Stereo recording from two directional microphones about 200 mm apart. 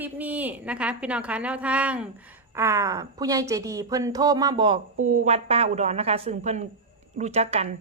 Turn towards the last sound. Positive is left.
turn(degrees=-30)  # may be behind; listen again after turning